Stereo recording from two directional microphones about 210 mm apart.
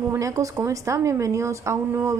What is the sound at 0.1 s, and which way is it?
A woman's voice, 15° right (ahead or behind).